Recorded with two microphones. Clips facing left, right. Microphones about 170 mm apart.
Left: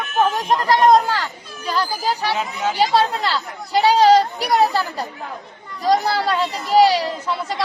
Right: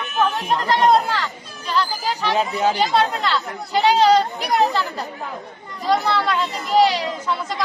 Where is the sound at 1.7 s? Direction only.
40° left (ahead or behind).